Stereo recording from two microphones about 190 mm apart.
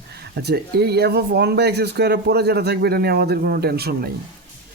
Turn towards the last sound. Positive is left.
turn(degrees=-55)  # may be behind; listen again after turning